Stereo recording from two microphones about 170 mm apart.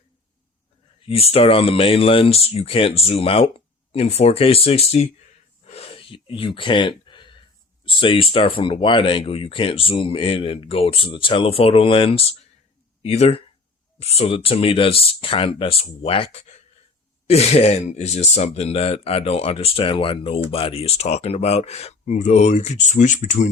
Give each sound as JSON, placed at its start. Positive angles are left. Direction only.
{"t": 1.0, "sound": "speech", "side_deg": 35}
{"t": 5.6, "sound": "a sound", "side_deg": 35}
{"t": 7.9, "sound": "speech", "side_deg": 30}